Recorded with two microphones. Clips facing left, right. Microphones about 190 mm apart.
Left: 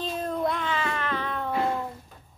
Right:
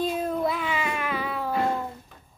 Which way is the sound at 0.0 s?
10° right (ahead or behind).